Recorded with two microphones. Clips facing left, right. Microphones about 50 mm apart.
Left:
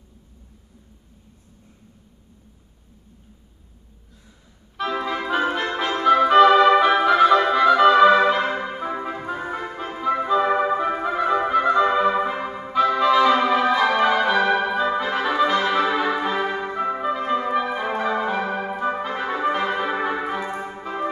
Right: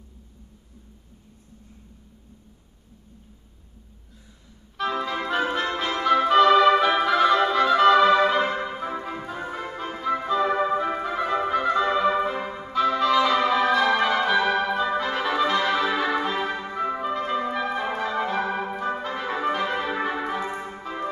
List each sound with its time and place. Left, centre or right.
4.7 s organ: centre
5.9 s music: centre
11.5 s clarinet: centre
13.5 s music: centre